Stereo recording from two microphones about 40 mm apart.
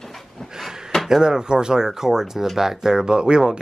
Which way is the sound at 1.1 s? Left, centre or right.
Centre.